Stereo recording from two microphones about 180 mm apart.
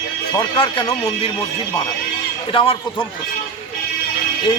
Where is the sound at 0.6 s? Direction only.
30° left (ahead or behind).